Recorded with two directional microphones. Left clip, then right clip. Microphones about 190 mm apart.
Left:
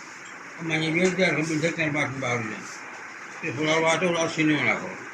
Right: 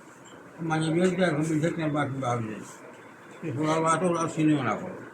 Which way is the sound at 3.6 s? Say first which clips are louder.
Left 2 dB; 25° right (ahead or behind).